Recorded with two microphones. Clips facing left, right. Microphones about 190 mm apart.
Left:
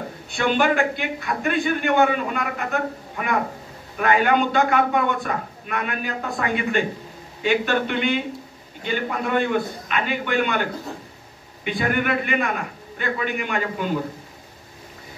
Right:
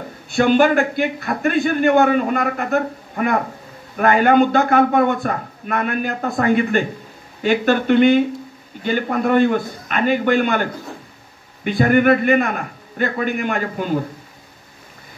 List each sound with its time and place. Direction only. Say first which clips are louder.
0.4 s a man's voice: right 6 dB; 45° right (ahead or behind)